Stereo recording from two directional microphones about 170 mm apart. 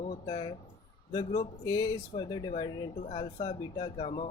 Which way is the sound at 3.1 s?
35° left (ahead or behind).